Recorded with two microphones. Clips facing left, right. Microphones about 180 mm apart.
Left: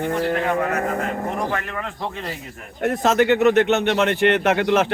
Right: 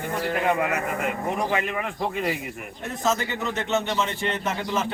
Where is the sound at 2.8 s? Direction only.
70° left (ahead or behind).